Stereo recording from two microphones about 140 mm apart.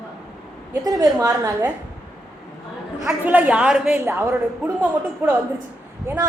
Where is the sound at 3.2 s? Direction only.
10° right (ahead or behind).